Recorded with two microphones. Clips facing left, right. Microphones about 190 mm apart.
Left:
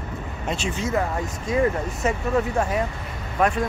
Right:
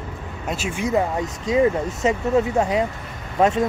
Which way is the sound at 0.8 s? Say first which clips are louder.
Right 5 dB; 15° right (ahead or behind).